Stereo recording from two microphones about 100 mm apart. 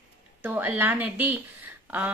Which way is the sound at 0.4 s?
15° right (ahead or behind).